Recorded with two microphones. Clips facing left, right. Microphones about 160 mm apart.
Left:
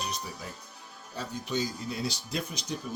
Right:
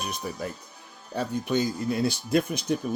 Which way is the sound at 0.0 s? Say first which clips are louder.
Right 5 dB; 55° right (ahead or behind).